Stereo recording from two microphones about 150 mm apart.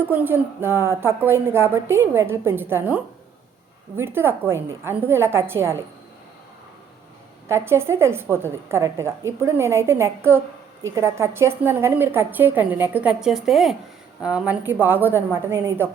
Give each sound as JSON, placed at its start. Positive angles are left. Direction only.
{"t": 0.1, "sound": "a woman's voice", "side_deg": -15}
{"t": 7.4, "sound": "a woman's voice", "side_deg": -15}